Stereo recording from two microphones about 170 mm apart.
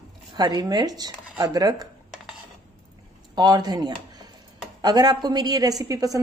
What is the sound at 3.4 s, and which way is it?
A woman's voice, 25° right (ahead or behind).